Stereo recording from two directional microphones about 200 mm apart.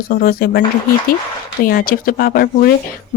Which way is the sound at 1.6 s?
45° left (ahead or behind).